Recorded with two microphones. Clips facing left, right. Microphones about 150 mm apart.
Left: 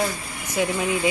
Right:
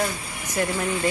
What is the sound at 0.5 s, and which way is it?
Speech, 5° left (ahead or behind).